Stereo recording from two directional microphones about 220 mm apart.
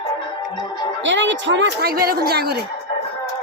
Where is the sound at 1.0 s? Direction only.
55° right (ahead or behind).